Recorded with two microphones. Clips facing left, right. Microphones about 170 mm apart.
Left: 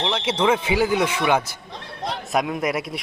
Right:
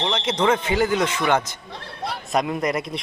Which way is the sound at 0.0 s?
10° left (ahead or behind).